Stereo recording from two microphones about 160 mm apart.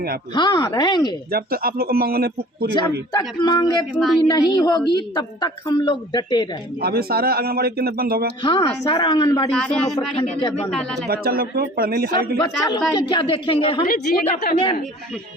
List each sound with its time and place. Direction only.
0.3 s a woman's voice: 25° left (ahead or behind)
1.3 s a man's voice: 70° right (ahead or behind)
3.1 s a woman's voice: 25° left (ahead or behind)
3.9 s speech: centre (ahead or behind)
4.3 s a woman's voice: 25° left (ahead or behind)
6.8 s a man's voice: 75° right (ahead or behind)
8.4 s a woman's voice: 30° left (ahead or behind)
9.5 s speech: 5° left (ahead or behind)
10.2 s a woman's voice: 35° left (ahead or behind)
11.1 s a man's voice: 70° right (ahead or behind)
12.4 s a woman's voice: 30° left (ahead or behind)
13.8 s a woman's voice: 70° left (ahead or behind)